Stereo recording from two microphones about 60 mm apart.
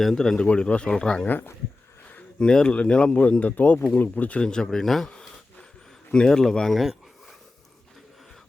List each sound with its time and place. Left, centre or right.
0.0 s speech: centre
2.4 s speech: centre
3.5 s speech: left; by 5.1 s centre
6.1 s speech: centre
6.7 s a sound: centre